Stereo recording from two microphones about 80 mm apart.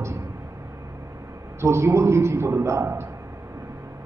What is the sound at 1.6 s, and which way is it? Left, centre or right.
A man's voice, right.